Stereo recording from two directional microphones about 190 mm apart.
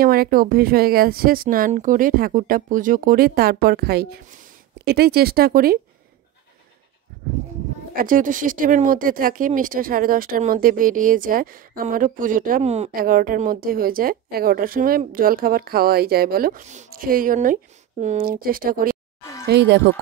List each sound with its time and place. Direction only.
0.0 s speech: 50° right (ahead or behind)
7.9 s speech: 45° right (ahead or behind)
12.9 s speech: 50° right (ahead or behind)
19.4 s speech: 65° right (ahead or behind)